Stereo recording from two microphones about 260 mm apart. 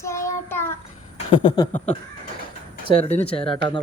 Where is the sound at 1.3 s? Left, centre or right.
Centre.